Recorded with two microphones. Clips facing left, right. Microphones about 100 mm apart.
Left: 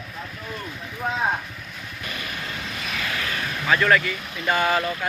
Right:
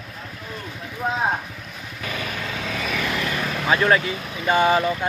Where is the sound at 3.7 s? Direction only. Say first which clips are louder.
Right 1 dB; 25° right (ahead or behind).